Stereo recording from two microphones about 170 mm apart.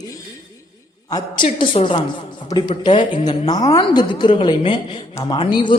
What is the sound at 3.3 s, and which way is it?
A woman's voice, 25° left (ahead or behind).